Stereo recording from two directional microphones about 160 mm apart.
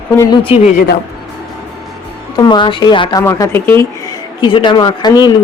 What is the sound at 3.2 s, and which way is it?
Speech, 15° left (ahead or behind).